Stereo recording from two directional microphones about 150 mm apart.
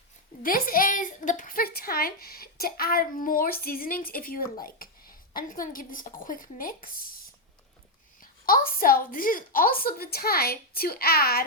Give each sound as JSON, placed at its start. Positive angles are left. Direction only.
{"t": 0.4, "sound": "a woman's voice", "side_deg": 75}
{"t": 3.6, "sound": "a woman's voice", "side_deg": 80}
{"t": 8.2, "sound": "a sound", "side_deg": 75}
{"t": 8.8, "sound": "a woman's voice", "side_deg": 70}